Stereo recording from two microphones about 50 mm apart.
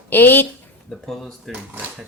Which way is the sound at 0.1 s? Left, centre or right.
Left.